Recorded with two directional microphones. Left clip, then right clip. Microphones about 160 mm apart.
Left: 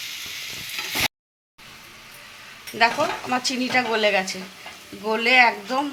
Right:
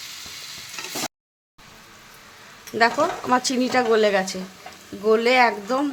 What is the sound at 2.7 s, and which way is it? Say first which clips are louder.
Speech: right 1 dB; 60° right (ahead or behind).